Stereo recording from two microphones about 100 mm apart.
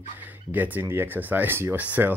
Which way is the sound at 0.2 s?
15° right (ahead or behind).